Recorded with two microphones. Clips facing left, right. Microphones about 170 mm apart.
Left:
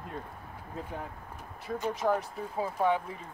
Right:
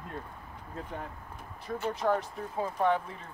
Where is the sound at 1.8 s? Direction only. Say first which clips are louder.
Even; 5° left (ahead or behind).